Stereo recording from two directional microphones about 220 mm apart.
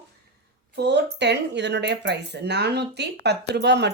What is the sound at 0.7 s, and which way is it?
Speech, 50° right (ahead or behind).